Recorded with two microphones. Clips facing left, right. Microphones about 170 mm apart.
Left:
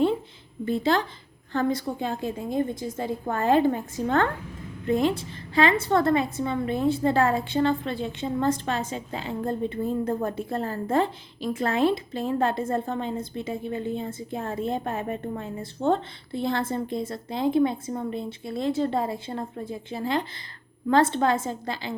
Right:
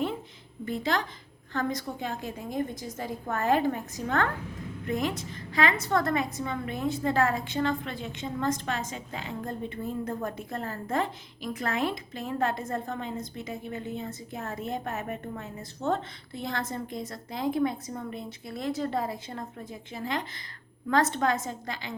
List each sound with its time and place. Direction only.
0.6 s a woman's voice: 30° left (ahead or behind)